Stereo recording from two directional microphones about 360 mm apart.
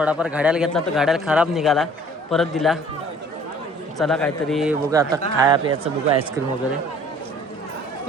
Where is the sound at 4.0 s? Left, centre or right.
Centre.